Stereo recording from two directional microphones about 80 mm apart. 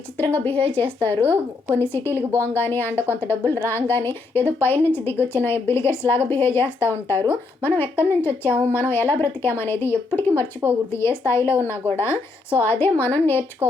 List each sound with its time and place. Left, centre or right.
0.2 s a woman's voice: left
13.6 s speech: right